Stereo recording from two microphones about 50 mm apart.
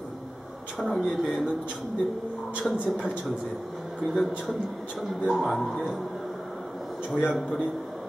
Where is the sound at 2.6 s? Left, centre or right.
Centre.